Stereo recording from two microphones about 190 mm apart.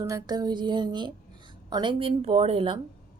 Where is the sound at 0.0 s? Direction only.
20° right (ahead or behind).